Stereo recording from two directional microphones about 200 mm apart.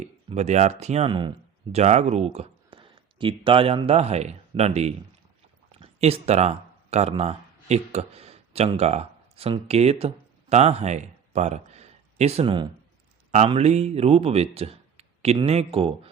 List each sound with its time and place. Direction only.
0.0 s speech: 35° right (ahead or behind)